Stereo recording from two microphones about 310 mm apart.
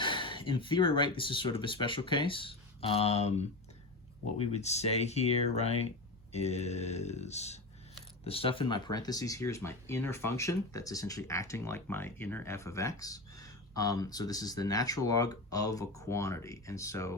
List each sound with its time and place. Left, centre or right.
0.0 s speech: centre